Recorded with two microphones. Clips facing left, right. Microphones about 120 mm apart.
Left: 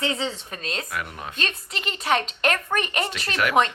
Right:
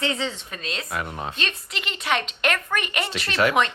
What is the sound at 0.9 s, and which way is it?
Speech, 25° right (ahead or behind).